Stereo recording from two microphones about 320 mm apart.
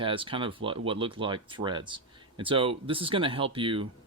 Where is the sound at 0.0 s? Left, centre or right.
Centre.